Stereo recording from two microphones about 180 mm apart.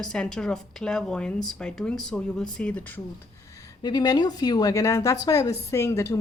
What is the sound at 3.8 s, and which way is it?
A woman's voice, 20° left (ahead or behind).